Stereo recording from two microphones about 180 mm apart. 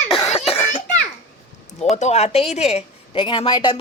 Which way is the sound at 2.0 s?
35° left (ahead or behind).